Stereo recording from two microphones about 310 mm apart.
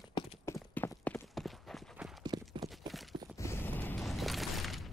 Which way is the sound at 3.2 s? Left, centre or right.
Centre.